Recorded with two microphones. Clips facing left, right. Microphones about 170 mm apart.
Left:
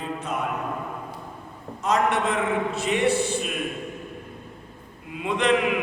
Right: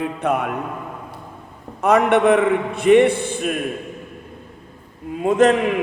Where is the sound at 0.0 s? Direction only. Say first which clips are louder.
Right 8 dB; 60° right (ahead or behind).